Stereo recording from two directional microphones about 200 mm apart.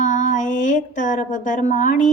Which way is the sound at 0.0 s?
35° left (ahead or behind).